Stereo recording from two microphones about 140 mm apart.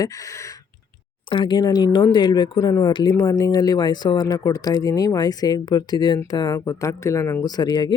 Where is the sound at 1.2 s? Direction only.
35° left (ahead or behind).